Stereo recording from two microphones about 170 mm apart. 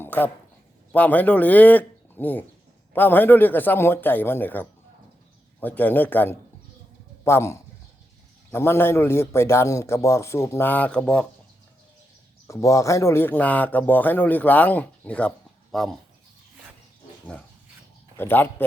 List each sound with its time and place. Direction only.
0.0 s a sound: 10° left (ahead or behind)
0.9 s a man's voice: 10° left (ahead or behind)
12.5 s a man's voice: 20° left (ahead or behind); by 16.0 s centre (ahead or behind)
18.2 s a man's voice: 10° left (ahead or behind)